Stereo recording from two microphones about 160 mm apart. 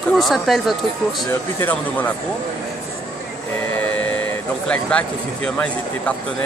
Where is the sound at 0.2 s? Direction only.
Centre (ahead or behind).